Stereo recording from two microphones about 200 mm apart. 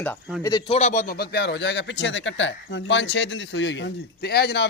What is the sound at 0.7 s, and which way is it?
Speech, 35° left (ahead or behind).